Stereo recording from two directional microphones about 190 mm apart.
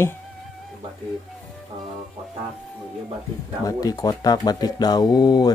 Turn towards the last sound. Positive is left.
turn(degrees=20)  # may be behind; listen again after turning